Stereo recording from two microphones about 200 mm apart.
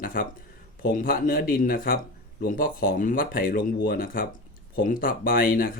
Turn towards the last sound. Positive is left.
turn(degrees=45)  # may be behind; listen again after turning